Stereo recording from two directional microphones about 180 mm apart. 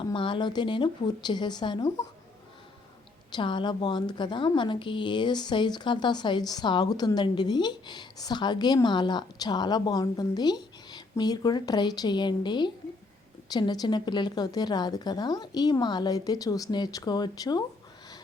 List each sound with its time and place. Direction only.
0.0 s a woman's voice: 25° left (ahead or behind)
3.3 s a woman's voice: 25° left (ahead or behind)